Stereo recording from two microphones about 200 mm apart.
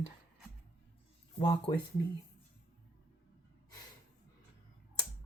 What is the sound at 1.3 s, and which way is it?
Speech, 25° left (ahead or behind).